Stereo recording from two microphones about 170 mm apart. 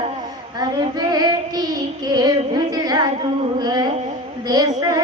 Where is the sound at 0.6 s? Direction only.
25° right (ahead or behind).